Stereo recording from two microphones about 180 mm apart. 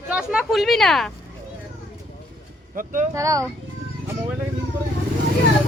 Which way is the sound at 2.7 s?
45° right (ahead or behind).